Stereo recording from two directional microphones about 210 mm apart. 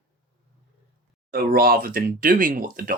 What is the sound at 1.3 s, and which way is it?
Speech, 45° right (ahead or behind).